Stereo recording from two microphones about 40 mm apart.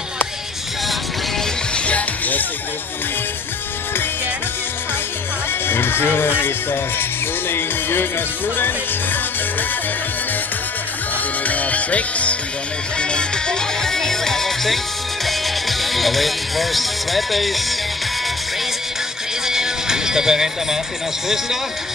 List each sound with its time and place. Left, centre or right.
1.9 s music: left
5.7 s speech: left
6.4 s music: left
8.5 s speech: left
11.4 s music: left
13.0 s music: left
13.8 s music: centre
15.2 s speech: centre
19.4 s music: centre